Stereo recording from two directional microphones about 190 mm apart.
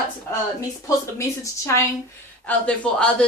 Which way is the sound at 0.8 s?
15° left (ahead or behind).